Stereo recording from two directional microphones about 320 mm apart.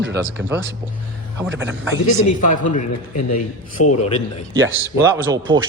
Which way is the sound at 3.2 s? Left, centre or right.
Left.